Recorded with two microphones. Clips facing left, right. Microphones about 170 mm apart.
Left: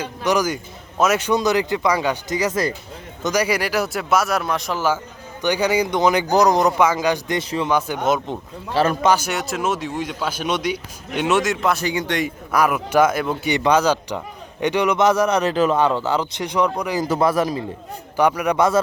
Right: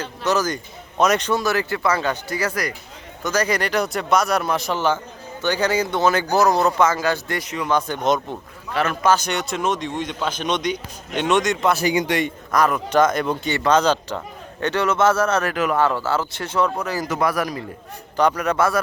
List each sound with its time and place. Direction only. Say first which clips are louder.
0.0 s speech: left 1 dB; 15° left (ahead or behind)
1.3 s speech: left 3 dB; 20° left (ahead or behind)
3.2 s speech: left 1 dB; 10° left (ahead or behind)
5.4 s speech: left 2 dB; 15° left (ahead or behind)
7.4 s speech: left 4 dB; 30° left (ahead or behind)
7.7 s speech: right 1 dB; 10° left (ahead or behind)
8.7 s speech: left 4 dB; 30° left (ahead or behind)
9.0 s speech: left 1 dB; 10° left (ahead or behind); by 12.2 s 10° right (ahead or behind)
12.2 s speech: even; 10° left (ahead or behind)
17.1 s a man's voice: left 4 dB; 25° left (ahead or behind)
18.2 s speech: left 1 dB; 10° left (ahead or behind)